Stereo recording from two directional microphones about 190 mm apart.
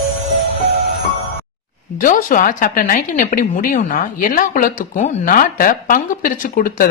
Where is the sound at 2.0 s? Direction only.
45° left (ahead or behind).